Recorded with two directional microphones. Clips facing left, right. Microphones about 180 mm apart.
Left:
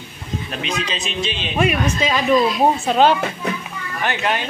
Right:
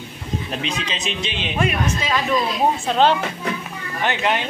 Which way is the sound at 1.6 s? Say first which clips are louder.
Left 4 dB; 15° left (ahead or behind).